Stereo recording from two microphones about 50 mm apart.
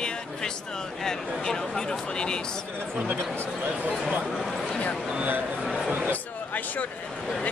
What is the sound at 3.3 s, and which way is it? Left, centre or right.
Speech, right.